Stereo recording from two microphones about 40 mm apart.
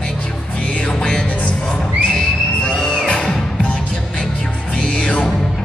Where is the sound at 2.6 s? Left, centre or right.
Centre.